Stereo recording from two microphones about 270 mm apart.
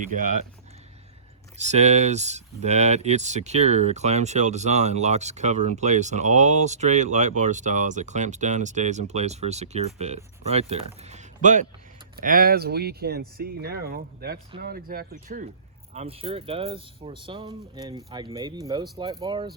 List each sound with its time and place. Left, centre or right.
0.1 s speech: right
1.5 s speech: right
11.0 s a sound: right
12.2 s speech: right